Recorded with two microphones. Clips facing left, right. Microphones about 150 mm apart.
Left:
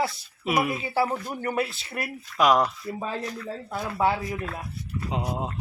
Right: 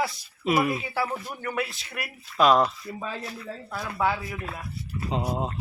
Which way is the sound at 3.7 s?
25° left (ahead or behind).